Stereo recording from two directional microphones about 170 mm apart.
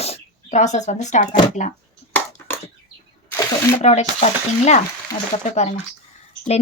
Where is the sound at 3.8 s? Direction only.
40° left (ahead or behind).